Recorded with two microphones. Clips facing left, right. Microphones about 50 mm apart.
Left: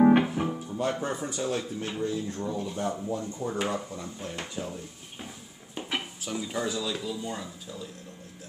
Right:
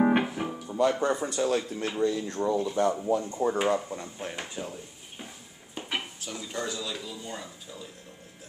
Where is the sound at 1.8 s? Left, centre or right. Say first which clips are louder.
Right 3 dB; right.